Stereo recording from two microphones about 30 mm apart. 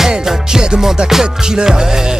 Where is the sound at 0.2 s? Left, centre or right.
Centre.